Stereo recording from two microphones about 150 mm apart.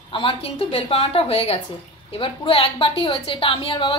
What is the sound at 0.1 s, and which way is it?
A woman's voice, 35° left (ahead or behind).